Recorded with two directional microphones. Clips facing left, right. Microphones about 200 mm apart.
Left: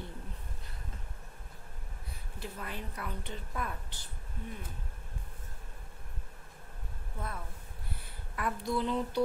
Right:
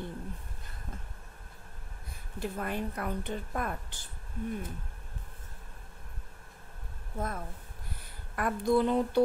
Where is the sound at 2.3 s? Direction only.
50° right (ahead or behind).